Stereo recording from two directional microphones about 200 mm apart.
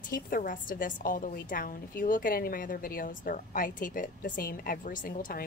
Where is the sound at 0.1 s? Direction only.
45° left (ahead or behind).